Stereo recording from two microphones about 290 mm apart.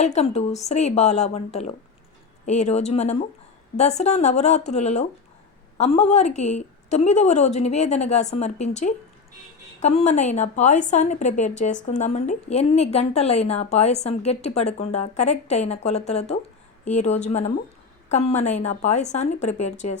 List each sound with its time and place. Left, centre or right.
0.0 s a woman's voice: left